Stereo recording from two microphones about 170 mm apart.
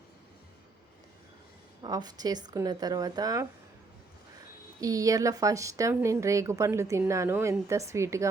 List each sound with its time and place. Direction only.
1.8 s speech: 25° right (ahead or behind)
4.8 s a woman's voice: 20° right (ahead or behind)